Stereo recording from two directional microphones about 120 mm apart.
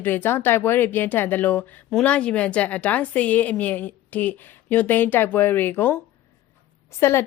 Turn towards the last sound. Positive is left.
turn(degrees=20)  # may be behind; listen again after turning